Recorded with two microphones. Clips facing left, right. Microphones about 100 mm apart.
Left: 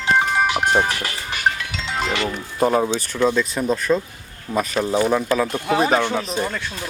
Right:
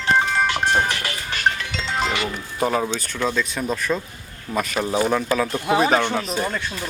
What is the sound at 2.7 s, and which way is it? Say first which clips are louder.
Speech: left 4 dB; 10° left (ahead or behind).